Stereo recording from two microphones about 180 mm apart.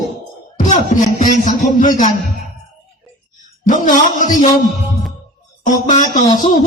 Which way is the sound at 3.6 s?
45° left (ahead or behind).